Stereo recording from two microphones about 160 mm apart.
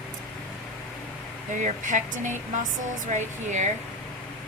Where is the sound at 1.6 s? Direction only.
50° right (ahead or behind).